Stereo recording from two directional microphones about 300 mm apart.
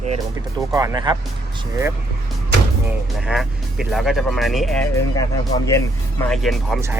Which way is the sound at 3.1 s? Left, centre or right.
Centre.